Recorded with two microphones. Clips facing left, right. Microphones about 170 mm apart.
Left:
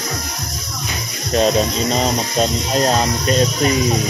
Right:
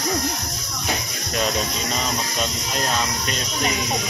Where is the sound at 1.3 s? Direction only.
35° left (ahead or behind).